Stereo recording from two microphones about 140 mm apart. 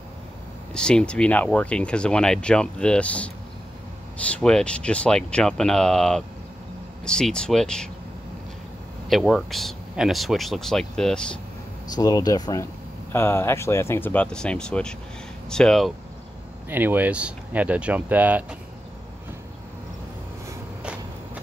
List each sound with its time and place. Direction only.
0.7 s speech: 5° left (ahead or behind)
9.1 s speech: centre (ahead or behind)
11.9 s speech: 30° left (ahead or behind)
13.1 s speech: 15° left (ahead or behind)
16.6 s speech: 15° right (ahead or behind)